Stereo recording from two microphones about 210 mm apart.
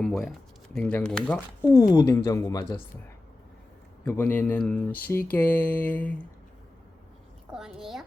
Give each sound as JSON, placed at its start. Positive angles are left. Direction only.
{"t": 0.0, "sound": "speech", "side_deg": 0}
{"t": 1.7, "sound": "speech", "side_deg": 15}
{"t": 4.0, "sound": "speech", "side_deg": 10}
{"t": 7.5, "sound": "a child's voice", "side_deg": 0}